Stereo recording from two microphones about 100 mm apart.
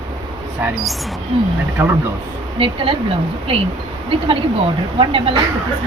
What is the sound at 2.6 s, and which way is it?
Speech, 65° right (ahead or behind).